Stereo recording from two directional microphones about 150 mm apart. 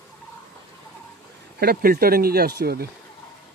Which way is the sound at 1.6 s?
80° right.